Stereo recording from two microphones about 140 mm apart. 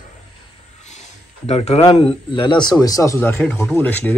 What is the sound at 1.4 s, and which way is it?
Speech, 50° left (ahead or behind).